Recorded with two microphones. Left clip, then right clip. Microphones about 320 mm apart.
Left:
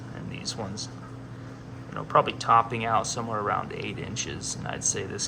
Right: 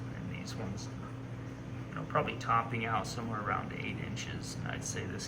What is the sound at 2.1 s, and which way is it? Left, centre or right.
A man's voice, centre.